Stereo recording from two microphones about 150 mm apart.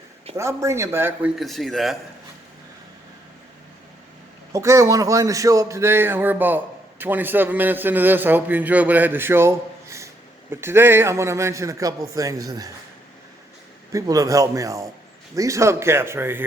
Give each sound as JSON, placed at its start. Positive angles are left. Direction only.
{"t": 0.3, "sound": "a man's voice", "side_deg": -20}
{"t": 1.4, "sound": "speech", "side_deg": 0}
{"t": 4.5, "sound": "a man's voice", "side_deg": -20}
{"t": 13.9, "sound": "a man's voice", "side_deg": -20}